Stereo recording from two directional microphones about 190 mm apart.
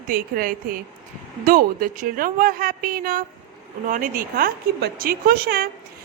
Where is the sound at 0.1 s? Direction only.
50° right (ahead or behind).